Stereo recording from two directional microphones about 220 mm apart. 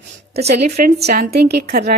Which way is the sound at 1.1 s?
45° right (ahead or behind).